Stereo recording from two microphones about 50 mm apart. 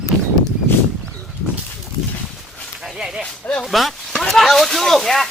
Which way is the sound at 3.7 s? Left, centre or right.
Centre.